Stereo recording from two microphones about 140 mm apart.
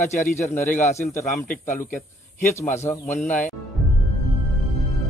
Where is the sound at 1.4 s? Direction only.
75° left (ahead or behind).